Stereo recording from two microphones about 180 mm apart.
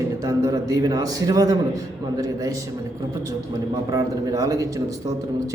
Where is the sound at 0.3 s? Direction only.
20° right (ahead or behind).